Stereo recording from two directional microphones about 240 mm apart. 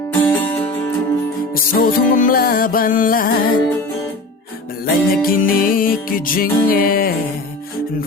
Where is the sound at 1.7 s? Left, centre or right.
Left.